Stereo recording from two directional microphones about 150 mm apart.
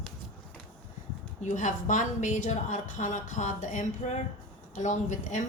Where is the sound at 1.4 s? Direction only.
55° left (ahead or behind).